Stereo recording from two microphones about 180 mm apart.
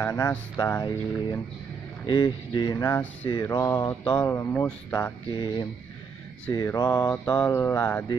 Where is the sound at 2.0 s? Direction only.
25° left (ahead or behind).